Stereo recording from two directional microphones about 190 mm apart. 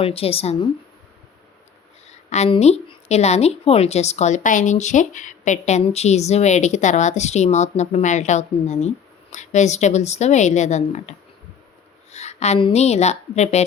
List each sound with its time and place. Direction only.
0.0 s a woman's voice: 30° left (ahead or behind)
2.3 s a woman's voice: 35° left (ahead or behind)
12.1 s a woman's voice: 35° left (ahead or behind)